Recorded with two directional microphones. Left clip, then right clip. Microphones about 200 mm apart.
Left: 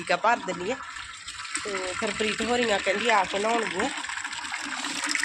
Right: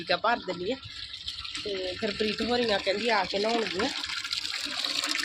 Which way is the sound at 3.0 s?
Centre (ahead or behind).